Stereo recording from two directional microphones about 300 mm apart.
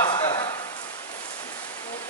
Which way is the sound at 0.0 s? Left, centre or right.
Centre.